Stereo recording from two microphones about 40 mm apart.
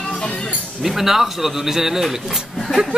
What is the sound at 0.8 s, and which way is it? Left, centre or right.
A man's voice, centre.